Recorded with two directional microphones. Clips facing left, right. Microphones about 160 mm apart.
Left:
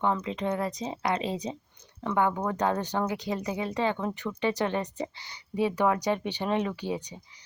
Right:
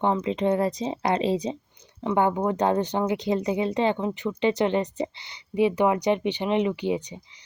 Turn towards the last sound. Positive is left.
turn(degrees=-25)  # may be behind; listen again after turning